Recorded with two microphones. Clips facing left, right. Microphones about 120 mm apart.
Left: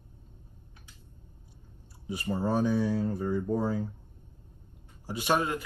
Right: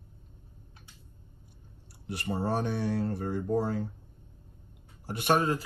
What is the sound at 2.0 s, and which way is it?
Speech, 70° right (ahead or behind).